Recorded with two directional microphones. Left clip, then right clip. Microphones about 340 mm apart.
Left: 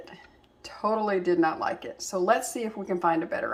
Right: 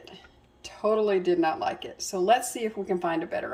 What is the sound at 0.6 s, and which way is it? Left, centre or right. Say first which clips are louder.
A woman's voice: right 2 dB; left.